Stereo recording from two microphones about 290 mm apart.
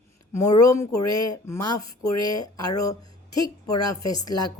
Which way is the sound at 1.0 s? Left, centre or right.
Left.